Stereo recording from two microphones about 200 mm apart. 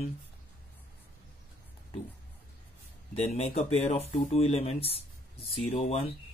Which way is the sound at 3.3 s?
30° left (ahead or behind).